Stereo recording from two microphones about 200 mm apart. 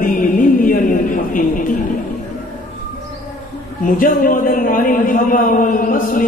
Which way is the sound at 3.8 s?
45° left (ahead or behind).